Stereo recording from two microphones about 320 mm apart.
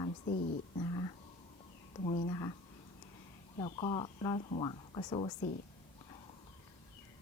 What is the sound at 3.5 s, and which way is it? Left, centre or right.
Speech, centre.